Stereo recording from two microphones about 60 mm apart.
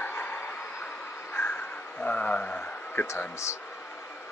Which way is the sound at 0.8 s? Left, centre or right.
Left.